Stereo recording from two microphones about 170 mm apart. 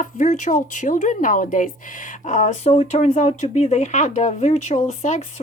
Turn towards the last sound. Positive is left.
turn(degrees=45)  # may be behind; listen again after turning